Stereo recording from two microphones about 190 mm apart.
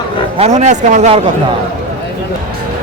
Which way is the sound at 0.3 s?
35° right (ahead or behind).